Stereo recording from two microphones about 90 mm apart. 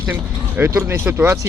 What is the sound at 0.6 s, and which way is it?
Speech, 20° right (ahead or behind).